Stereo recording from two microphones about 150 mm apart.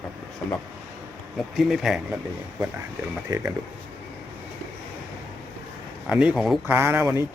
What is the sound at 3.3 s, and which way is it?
Speech, 15° right (ahead or behind).